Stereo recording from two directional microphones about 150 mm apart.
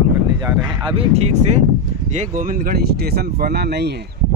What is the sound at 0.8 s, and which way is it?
Speech, 40° right (ahead or behind).